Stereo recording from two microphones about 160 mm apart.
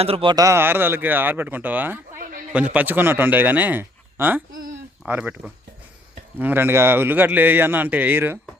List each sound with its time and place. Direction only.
0.0 s speech: 35° right (ahead or behind); by 2.0 s 10° right (ahead or behind)
2.1 s a sound: 60° right (ahead or behind)
2.7 s speech: 10° right (ahead or behind)